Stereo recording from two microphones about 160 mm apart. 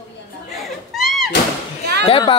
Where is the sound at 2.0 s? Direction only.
30° left (ahead or behind).